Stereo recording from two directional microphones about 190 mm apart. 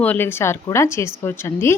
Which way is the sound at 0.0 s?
10° left (ahead or behind).